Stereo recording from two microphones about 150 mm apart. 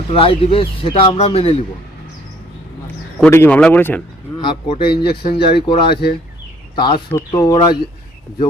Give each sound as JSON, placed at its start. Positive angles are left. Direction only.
{"t": 0.1, "sound": "speech", "side_deg": 35}
{"t": 2.8, "sound": "a man's voice", "side_deg": 10}
{"t": 4.4, "sound": "speech", "side_deg": 30}